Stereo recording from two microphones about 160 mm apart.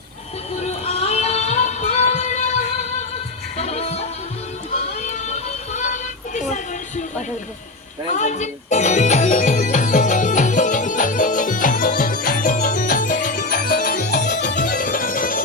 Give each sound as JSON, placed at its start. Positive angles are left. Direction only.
{"t": 0.6, "sound": "music", "side_deg": 40}
{"t": 8.1, "sound": "music", "side_deg": 50}